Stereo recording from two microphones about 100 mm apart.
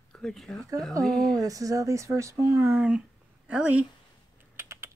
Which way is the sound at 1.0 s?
5° left (ahead or behind).